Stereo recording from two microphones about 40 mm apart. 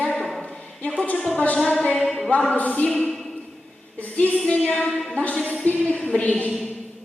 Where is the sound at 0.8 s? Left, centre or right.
Left.